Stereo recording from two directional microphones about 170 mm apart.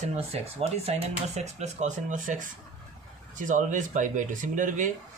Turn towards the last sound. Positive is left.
turn(degrees=-50)  # may be behind; listen again after turning